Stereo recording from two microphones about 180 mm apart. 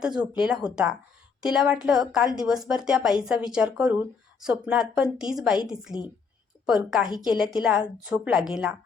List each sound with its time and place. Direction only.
0.0 s a woman's voice: 5° right (ahead or behind)
6.7 s a woman's voice: 5° right (ahead or behind)
7.1 s a woman's voice: 25° left (ahead or behind)
7.3 s a woman's voice: 5° right (ahead or behind)